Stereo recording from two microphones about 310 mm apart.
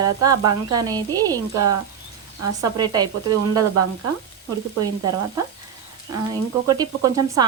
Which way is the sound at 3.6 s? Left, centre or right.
Right.